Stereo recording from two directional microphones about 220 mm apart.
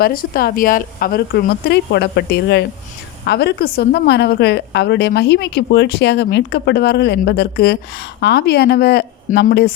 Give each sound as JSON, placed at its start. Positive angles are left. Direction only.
{"t": 0.0, "sound": "a woman's voice", "side_deg": 40}